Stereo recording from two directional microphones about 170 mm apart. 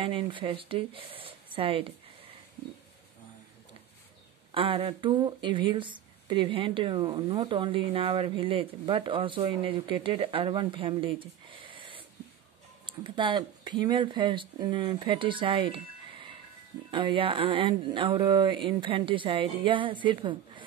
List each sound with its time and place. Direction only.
0.0 s speech: 30° right (ahead or behind)
4.5 s speech: 30° right (ahead or behind)